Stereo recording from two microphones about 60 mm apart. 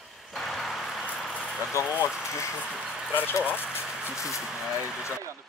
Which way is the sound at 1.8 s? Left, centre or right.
Left.